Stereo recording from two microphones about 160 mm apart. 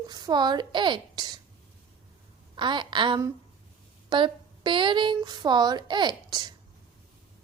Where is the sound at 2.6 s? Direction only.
30° right (ahead or behind).